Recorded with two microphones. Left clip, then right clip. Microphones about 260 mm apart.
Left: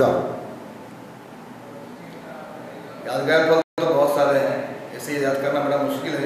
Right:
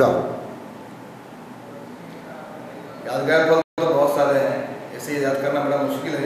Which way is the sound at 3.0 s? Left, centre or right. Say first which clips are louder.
Even; centre.